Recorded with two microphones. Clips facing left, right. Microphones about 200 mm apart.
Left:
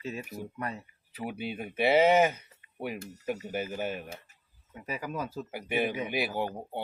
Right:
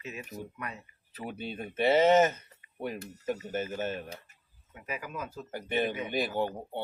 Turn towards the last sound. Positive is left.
turn(degrees=10)  # may be behind; listen again after turning